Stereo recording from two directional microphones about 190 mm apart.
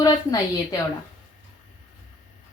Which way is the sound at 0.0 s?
20° left (ahead or behind).